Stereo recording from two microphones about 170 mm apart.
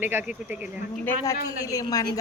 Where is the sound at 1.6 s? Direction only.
20° left (ahead or behind).